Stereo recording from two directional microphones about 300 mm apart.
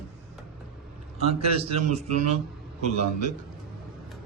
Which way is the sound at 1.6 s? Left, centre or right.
Right.